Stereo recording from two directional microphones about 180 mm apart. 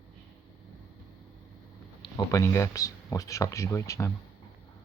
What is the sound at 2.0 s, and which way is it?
Speech, 20° left (ahead or behind).